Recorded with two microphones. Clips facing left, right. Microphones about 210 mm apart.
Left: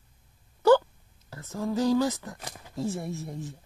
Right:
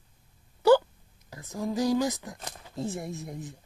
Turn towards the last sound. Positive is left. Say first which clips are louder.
# left 2 dB
turn(degrees=-15)  # may be behind; listen again after turning